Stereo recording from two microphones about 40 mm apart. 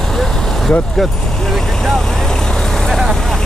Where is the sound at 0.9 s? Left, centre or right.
Centre.